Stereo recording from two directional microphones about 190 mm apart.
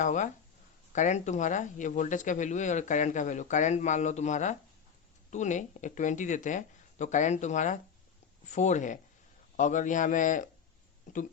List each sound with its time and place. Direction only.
0.0 s speech: 40° left (ahead or behind)